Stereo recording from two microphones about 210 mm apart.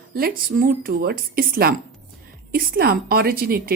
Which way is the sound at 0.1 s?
45° right (ahead or behind).